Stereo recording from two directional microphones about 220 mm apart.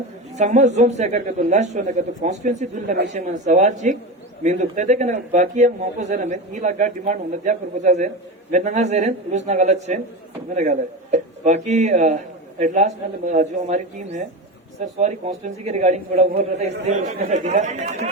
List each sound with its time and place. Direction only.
0.3 s a man's voice: 35° right (ahead or behind)